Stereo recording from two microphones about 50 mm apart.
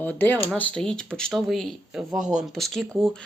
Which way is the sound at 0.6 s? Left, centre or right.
Left.